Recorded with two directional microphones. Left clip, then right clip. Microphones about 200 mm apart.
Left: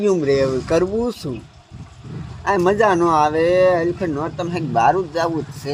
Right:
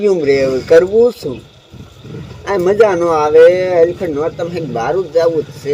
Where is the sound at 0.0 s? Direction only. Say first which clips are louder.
Right 5 dB; 40° left (ahead or behind).